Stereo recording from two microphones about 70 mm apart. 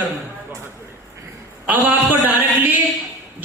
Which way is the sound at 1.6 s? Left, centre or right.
Right.